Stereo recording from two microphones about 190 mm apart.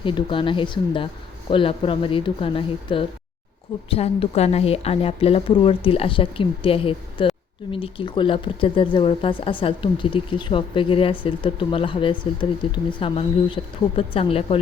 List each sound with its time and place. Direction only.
0.0 s a woman's voice: 25° left (ahead or behind)